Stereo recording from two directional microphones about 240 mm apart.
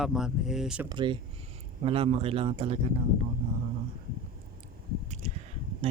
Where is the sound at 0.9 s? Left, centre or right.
Centre.